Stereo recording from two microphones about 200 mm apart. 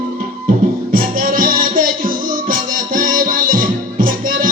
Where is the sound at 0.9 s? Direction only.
45° right (ahead or behind).